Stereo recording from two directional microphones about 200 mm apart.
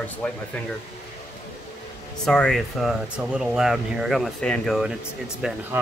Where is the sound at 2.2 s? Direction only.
5° left (ahead or behind).